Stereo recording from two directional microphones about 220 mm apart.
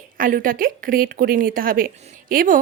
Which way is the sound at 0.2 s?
40° right (ahead or behind).